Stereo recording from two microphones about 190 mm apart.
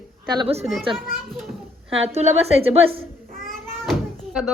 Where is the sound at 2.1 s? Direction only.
35° right (ahead or behind).